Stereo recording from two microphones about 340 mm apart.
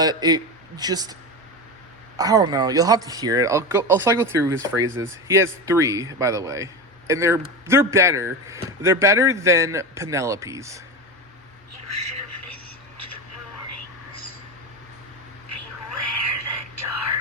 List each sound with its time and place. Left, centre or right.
0.0 s a man's voice: centre
2.1 s speech: centre
11.9 s a sound: right
16.3 s whispering: right